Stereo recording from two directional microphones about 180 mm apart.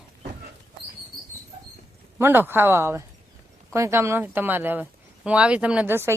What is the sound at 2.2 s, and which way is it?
Speech, 10° right (ahead or behind).